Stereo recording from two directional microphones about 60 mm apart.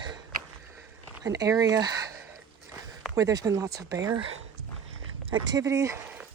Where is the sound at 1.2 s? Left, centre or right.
Right.